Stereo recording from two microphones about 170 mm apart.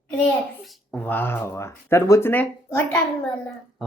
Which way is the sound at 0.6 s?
Centre (ahead or behind).